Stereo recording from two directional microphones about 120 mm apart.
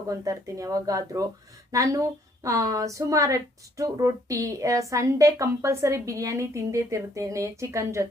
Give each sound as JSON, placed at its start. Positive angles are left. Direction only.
{"t": 0.1, "sound": "a woman's voice", "side_deg": -30}